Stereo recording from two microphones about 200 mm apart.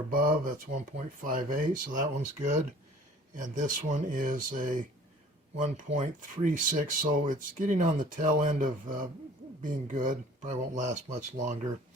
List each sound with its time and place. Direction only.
0.1 s speech: 45° right (ahead or behind)